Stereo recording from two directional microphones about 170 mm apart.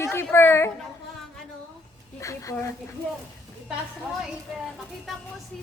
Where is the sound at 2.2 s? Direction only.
20° left (ahead or behind).